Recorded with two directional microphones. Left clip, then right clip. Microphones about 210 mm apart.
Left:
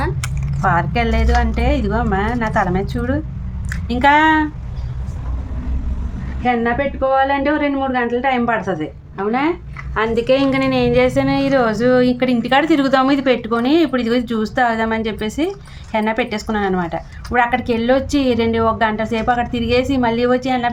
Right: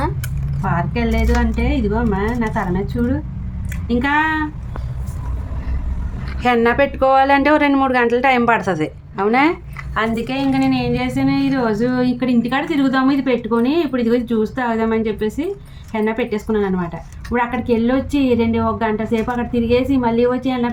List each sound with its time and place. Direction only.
0.8 s a woman's voice: 55° left (ahead or behind)
3.8 s speech: 50° left (ahead or behind)
6.4 s speech: 15° right (ahead or behind)
10.2 s a woman's voice: 45° left (ahead or behind)